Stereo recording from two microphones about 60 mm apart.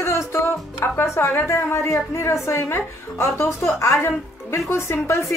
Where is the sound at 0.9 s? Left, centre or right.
Left.